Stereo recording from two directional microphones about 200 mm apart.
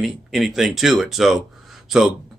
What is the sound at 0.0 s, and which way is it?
A man's voice, centre (ahead or behind).